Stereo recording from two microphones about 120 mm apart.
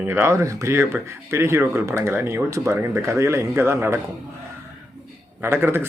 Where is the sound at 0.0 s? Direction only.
20° right (ahead or behind).